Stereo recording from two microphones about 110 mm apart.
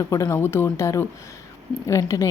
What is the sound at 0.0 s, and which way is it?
Speech, 30° left (ahead or behind).